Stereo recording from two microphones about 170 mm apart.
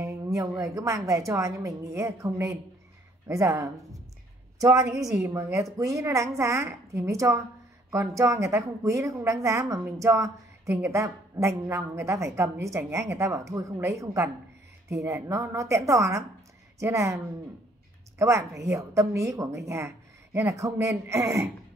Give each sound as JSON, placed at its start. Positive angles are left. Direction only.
{"t": 0.0, "sound": "a woman's voice", "side_deg": -20}
{"t": 18.2, "sound": "a woman's voice", "side_deg": -15}